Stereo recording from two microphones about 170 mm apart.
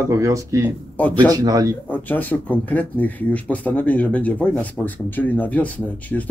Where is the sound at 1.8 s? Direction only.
10° left (ahead or behind).